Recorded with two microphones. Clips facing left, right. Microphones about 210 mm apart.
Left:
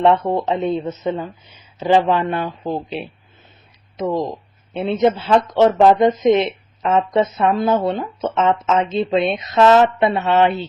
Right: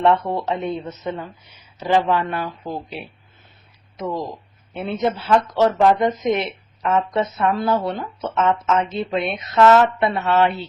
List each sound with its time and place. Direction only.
0.0 s speech: 25° left (ahead or behind)